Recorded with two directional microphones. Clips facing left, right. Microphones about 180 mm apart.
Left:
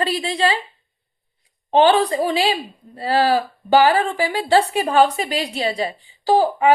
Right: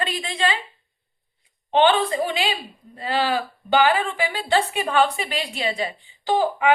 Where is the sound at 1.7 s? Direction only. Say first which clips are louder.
Left 3 dB; 35° left (ahead or behind).